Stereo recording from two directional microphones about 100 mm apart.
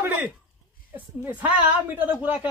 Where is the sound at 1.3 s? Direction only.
15° right (ahead or behind).